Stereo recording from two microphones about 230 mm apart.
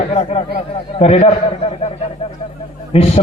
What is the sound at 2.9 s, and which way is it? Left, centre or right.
Speech, left.